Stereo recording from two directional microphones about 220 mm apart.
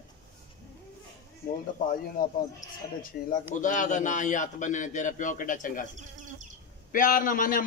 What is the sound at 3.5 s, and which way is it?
A man's voice, 35° left (ahead or behind).